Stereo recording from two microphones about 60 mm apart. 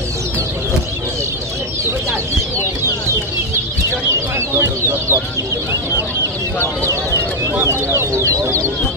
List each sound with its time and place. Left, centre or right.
4.1 s chicken: right
7.6 s speech: right